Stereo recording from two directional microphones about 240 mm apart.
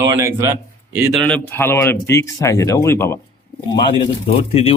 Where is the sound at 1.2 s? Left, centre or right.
Centre.